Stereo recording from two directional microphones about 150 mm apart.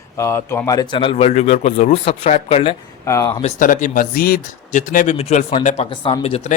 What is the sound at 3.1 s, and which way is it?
Speech, 20° left (ahead or behind).